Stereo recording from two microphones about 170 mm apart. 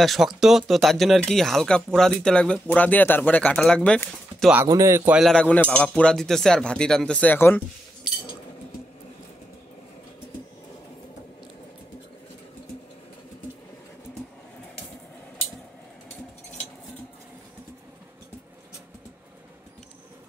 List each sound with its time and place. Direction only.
0.0 s speech: centre (ahead or behind)
4.6 s speech: 20° right (ahead or behind)
5.3 s speech: 10° left (ahead or behind)